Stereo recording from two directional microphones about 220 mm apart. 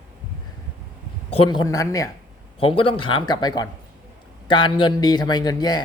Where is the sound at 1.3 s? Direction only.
20° left (ahead or behind).